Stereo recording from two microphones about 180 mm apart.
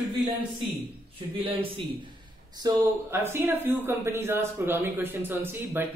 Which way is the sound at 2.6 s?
20° right (ahead or behind).